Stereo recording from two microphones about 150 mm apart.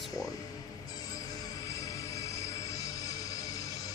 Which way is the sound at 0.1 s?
25° left (ahead or behind).